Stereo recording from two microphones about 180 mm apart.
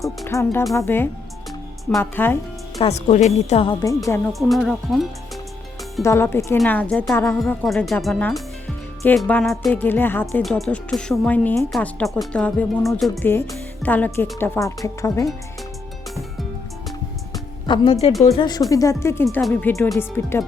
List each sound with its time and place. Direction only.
0.3 s a woman's voice: 15° left (ahead or behind)
2.8 s a woman's voice: 40° left (ahead or behind)
3.7 s a woman's voice: 20° left (ahead or behind)
4.3 s speech: centre (ahead or behind)
6.0 s a woman's voice: 15° left (ahead or behind)
17.7 s a woman's voice: 25° left (ahead or behind)